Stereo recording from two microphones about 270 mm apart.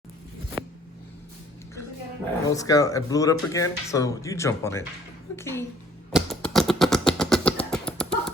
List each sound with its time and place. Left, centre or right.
2.5 s speech: centre
6.1 s a sound: centre
7.7 s finger snapping: centre